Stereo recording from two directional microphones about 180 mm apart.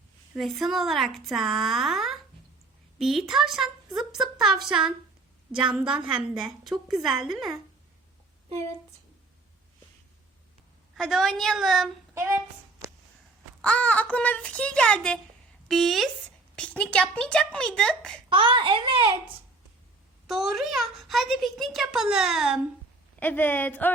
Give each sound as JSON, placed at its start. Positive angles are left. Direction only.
{"t": 0.3, "sound": "a child's voice", "side_deg": 0}
{"t": 10.9, "sound": "a child's voice", "side_deg": 0}
{"t": 13.6, "sound": "a child's voice", "side_deg": 5}
{"t": 18.3, "sound": "a child's voice", "side_deg": -30}
{"t": 20.2, "sound": "a child's voice", "side_deg": 0}
{"t": 23.2, "sound": "speech", "side_deg": 10}